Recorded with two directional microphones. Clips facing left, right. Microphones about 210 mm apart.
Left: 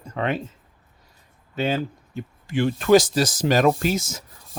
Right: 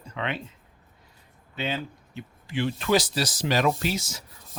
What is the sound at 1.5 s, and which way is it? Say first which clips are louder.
Speech: left 7 dB; 45° left (ahead or behind).